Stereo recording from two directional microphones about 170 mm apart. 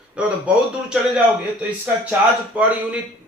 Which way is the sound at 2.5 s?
5° right (ahead or behind).